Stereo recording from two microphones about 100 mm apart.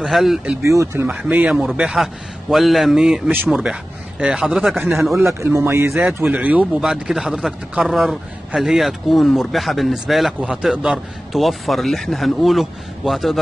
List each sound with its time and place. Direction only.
0.0 s a man's voice: centre (ahead or behind)
0.7 s speech: 30° right (ahead or behind)
1.0 s a man's voice: 10° right (ahead or behind)
5.2 s speech: 25° right (ahead or behind)
5.9 s a man's voice: 5° right (ahead or behind)